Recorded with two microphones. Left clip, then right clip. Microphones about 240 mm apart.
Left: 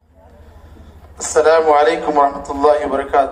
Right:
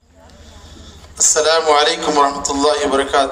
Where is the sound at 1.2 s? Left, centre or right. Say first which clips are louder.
Left 2 dB; right.